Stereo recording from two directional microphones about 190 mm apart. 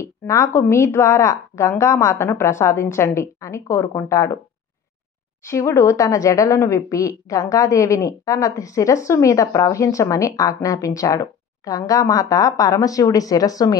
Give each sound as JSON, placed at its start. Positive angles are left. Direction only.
{"t": 0.0, "sound": "a woman's voice", "side_deg": 15}
{"t": 5.5, "sound": "a woman's voice", "side_deg": 15}